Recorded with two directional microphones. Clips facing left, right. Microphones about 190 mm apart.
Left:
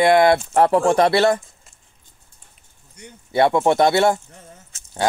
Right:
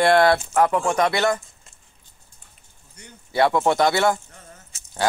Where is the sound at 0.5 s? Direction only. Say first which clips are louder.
Left 4 dB; 35° left (ahead or behind).